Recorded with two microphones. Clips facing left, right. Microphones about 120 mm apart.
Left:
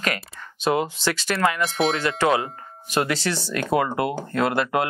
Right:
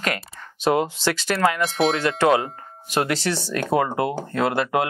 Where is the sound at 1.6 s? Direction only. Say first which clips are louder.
Right 2 dB; centre (ahead or behind).